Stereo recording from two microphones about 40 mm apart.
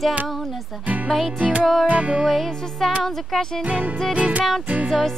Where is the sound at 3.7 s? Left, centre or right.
Right.